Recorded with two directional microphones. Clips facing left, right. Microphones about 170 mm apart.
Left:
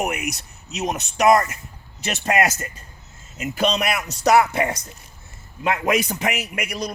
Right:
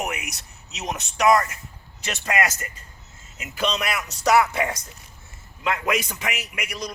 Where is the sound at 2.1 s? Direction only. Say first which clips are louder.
Left 4 dB; 30° left (ahead or behind).